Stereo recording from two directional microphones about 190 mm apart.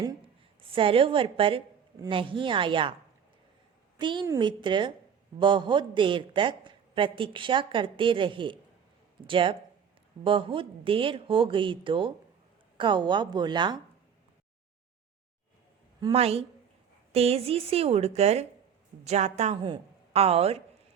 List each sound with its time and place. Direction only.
0.6 s a woman's voice: 30° right (ahead or behind)
3.9 s a woman's voice: 25° right (ahead or behind)
16.1 s a woman's voice: 30° right (ahead or behind)